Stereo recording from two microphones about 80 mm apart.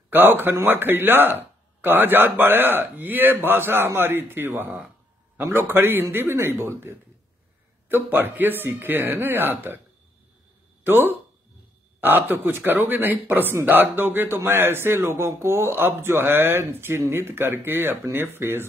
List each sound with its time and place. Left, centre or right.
0.1 s speech: right
10.8 s speech: right